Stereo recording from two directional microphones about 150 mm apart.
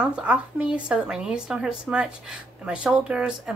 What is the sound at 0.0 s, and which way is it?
A woman's voice, 5° right (ahead or behind).